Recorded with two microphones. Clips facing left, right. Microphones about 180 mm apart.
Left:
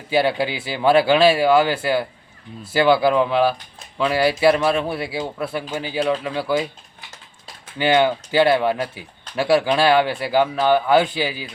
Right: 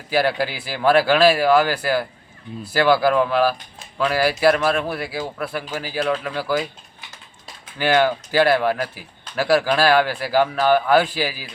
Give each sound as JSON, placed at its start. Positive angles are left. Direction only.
{"t": 0.1, "sound": "speech", "side_deg": 25}
{"t": 7.8, "sound": "speech", "side_deg": 25}